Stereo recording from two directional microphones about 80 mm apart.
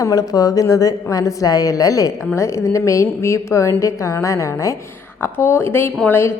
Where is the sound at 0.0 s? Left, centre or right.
Left.